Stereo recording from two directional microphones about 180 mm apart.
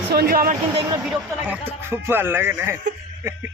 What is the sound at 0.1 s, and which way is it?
Speech, 60° right (ahead or behind).